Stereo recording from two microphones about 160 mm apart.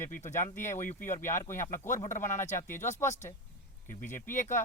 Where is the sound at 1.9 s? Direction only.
50° left (ahead or behind).